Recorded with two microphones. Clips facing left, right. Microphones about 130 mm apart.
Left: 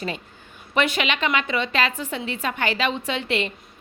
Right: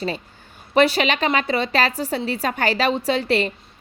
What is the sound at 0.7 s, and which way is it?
A woman's voice, 35° right (ahead or behind).